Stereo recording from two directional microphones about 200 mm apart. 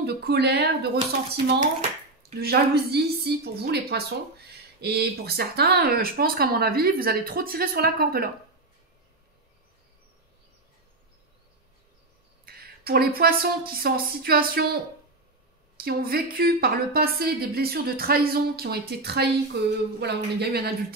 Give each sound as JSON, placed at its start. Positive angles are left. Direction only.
{"t": 0.0, "sound": "speech", "side_deg": -55}
{"t": 1.3, "sound": "speech", "side_deg": -30}
{"t": 2.4, "sound": "a woman's voice", "side_deg": -55}
{"t": 12.4, "sound": "a woman's voice", "side_deg": -50}
{"t": 15.8, "sound": "a woman's voice", "side_deg": -50}